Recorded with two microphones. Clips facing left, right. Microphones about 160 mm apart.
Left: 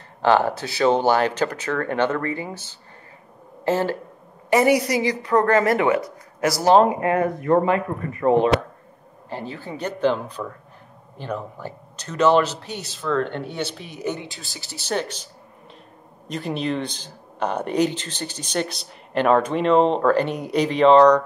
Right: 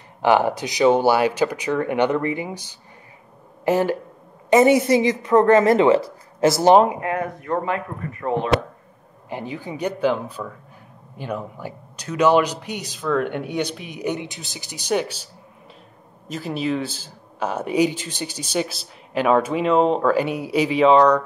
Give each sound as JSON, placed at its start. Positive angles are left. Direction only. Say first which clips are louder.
{"t": 0.2, "sound": "a woman's voice", "louder": "right 1 dB", "side_deg": -15}
{"t": 6.8, "sound": "speech", "louder": "left 2 dB", "side_deg": -5}
{"t": 9.3, "sound": "speech", "louder": "right 2 dB", "side_deg": -15}
{"t": 16.3, "sound": "speech", "louder": "right 1 dB", "side_deg": -5}